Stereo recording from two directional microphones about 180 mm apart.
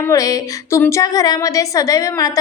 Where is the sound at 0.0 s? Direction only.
20° left (ahead or behind).